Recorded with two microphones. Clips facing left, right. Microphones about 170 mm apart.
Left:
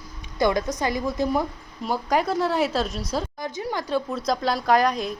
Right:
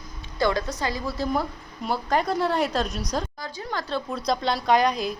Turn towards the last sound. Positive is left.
turn(degrees=0)  # may be behind; listen again after turning